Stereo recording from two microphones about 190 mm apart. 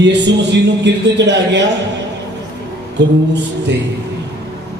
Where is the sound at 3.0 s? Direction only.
65° right (ahead or behind).